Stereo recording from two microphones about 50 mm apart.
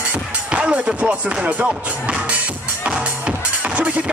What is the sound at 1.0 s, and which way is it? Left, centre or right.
Speech, right.